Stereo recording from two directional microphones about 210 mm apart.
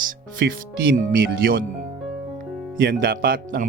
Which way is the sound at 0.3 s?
45° right (ahead or behind).